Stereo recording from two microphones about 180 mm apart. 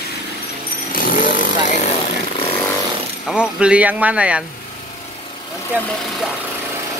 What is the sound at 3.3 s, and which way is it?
Speech, 5° right (ahead or behind).